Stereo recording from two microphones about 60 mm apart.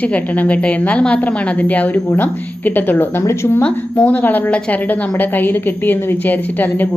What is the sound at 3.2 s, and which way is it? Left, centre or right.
Speech, left.